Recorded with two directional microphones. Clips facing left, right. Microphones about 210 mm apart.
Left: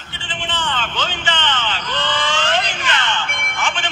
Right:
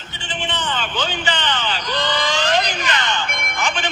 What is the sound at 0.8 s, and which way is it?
Speech, 10° right (ahead or behind).